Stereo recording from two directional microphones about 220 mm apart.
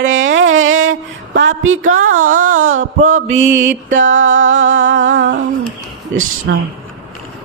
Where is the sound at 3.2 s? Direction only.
60° right (ahead or behind).